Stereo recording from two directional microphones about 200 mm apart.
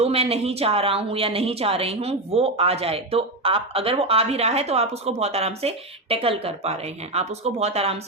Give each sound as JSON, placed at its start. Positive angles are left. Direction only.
{"t": 0.0, "sound": "speech", "side_deg": -30}